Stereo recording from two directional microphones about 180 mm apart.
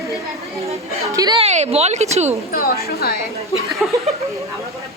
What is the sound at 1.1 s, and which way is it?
Speech, 20° right (ahead or behind).